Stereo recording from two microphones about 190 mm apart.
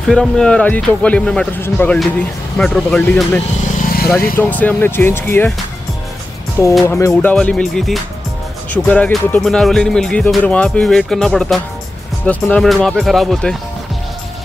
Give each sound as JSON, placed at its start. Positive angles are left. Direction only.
{"t": 0.1, "sound": "speech", "side_deg": 5}
{"t": 3.6, "sound": "vehicle", "side_deg": 50}
{"t": 4.4, "sound": "speech", "side_deg": 10}
{"t": 6.6, "sound": "speech", "side_deg": 15}